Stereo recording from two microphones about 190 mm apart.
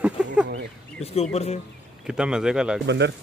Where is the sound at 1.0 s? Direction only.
35° left (ahead or behind).